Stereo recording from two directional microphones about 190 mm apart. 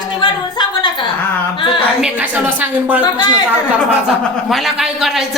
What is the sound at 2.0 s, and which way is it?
A woman's voice, 10° right (ahead or behind).